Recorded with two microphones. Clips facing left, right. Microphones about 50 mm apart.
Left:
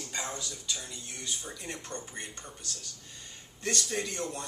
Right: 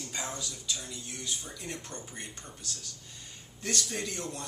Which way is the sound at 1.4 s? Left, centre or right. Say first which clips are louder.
Even; centre.